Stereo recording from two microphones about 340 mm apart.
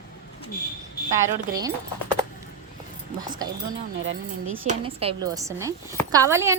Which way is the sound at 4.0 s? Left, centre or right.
Right.